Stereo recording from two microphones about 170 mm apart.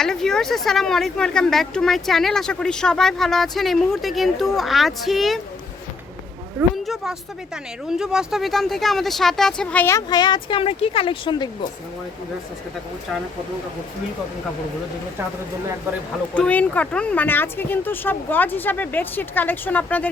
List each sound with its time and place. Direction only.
0.0 s speech: 5° left (ahead or behind)
6.8 s speech: centre (ahead or behind)
10.1 s a child's voice: 25° left (ahead or behind)
16.3 s speech: 10° left (ahead or behind)